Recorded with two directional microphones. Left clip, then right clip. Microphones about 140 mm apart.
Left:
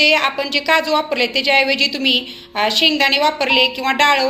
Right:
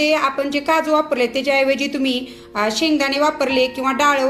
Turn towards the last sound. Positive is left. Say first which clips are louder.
# left 2 dB
turn(degrees=-55)  # may be behind; listen again after turning